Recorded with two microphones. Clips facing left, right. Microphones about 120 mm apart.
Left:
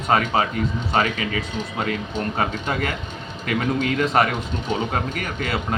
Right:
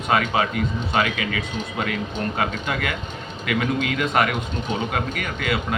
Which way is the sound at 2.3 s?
35° left (ahead or behind).